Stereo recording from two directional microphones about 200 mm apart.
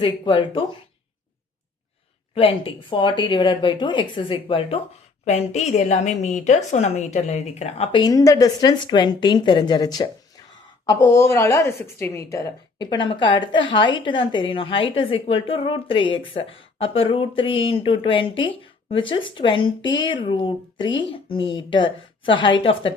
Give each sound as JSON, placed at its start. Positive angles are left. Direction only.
{"t": 0.0, "sound": "a woman's voice", "side_deg": 25}
{"t": 2.3, "sound": "a woman's voice", "side_deg": 30}
{"t": 8.0, "sound": "a woman's voice", "side_deg": 15}